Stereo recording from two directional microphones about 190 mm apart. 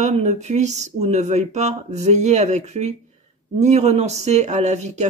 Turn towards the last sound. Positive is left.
turn(degrees=-35)  # may be behind; listen again after turning